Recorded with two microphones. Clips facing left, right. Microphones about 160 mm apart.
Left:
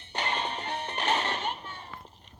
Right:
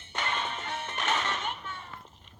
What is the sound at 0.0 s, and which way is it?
Music, 35° left (ahead or behind).